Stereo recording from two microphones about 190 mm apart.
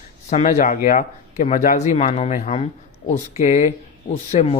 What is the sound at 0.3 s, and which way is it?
Speech, 40° left (ahead or behind).